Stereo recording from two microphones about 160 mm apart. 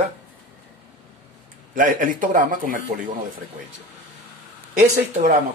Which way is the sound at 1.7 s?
55° right (ahead or behind).